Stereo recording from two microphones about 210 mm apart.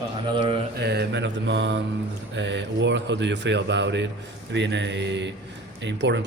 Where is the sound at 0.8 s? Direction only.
50° right (ahead or behind).